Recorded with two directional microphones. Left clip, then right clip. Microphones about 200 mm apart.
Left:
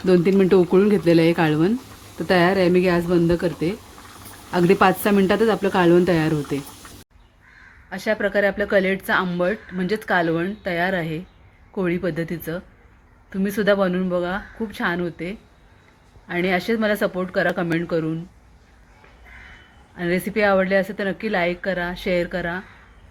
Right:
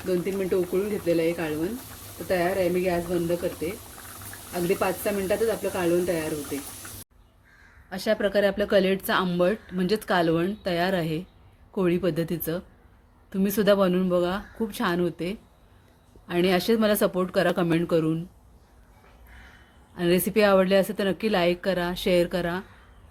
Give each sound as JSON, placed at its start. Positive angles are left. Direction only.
{"t": 0.1, "sound": "speech", "side_deg": 50}
{"t": 4.7, "sound": "speech", "side_deg": 55}
{"t": 7.9, "sound": "speech", "side_deg": -15}
{"t": 20.0, "sound": "speech", "side_deg": -25}